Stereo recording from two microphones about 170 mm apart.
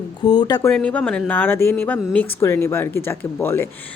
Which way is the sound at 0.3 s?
25° left (ahead or behind).